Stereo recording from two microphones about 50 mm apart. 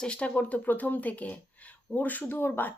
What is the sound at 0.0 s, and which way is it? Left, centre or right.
A woman's voice, left.